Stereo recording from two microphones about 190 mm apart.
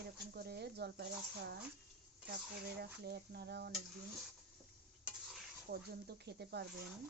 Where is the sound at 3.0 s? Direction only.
60° right (ahead or behind).